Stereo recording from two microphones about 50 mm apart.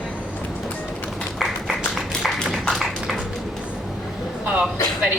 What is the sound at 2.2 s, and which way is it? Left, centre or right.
Music, centre.